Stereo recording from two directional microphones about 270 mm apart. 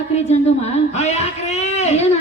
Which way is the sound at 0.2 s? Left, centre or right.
Left.